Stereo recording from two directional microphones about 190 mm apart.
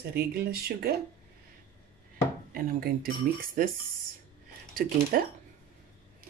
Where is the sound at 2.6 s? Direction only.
50° right (ahead or behind).